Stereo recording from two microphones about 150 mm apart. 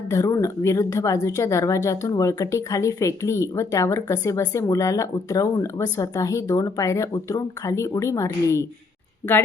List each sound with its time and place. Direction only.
0.1 s a woman's voice: 20° left (ahead or behind)